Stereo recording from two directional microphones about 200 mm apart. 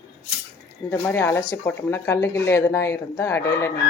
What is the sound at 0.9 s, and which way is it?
Speech, 10° left (ahead or behind).